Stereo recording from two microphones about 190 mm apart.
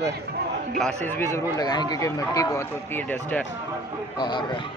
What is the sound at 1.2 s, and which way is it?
Speech, 15° left (ahead or behind).